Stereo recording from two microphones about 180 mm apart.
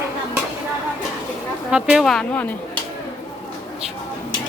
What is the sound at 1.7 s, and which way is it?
Speech, 5° right (ahead or behind).